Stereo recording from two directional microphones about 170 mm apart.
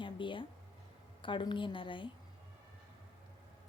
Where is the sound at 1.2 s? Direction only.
30° left (ahead or behind).